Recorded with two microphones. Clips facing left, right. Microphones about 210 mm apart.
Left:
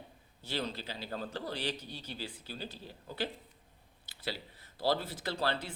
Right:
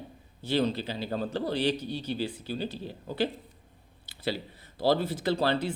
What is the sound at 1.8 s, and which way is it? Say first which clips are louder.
Speech: right 12 dB; 70° right (ahead or behind).